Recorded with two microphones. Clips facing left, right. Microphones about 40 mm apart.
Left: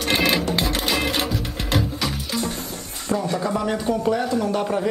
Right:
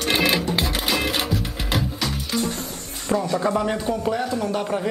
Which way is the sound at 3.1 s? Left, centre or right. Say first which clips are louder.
Right 1 dB; right.